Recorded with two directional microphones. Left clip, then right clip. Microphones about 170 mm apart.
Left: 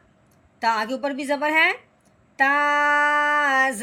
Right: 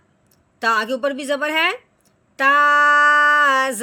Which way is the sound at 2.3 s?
45° right (ahead or behind).